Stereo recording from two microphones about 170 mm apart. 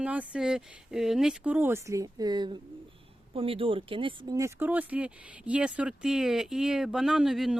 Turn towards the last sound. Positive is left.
turn(degrees=0)  # may be behind; listen again after turning